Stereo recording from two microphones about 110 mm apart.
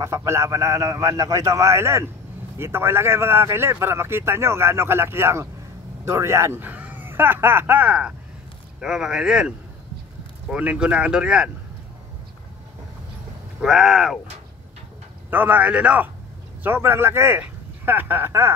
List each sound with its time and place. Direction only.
0.0 s speech: 25° right (ahead or behind); by 9.5 s 5° right (ahead or behind)
10.5 s speech: 10° right (ahead or behind)
13.6 s speech: 5° right (ahead or behind)
15.2 s speech: 15° right (ahead or behind)
16.6 s speech: 20° right (ahead or behind)